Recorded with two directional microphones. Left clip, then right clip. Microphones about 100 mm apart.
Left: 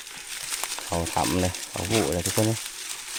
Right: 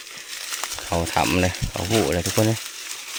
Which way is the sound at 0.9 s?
45° right (ahead or behind).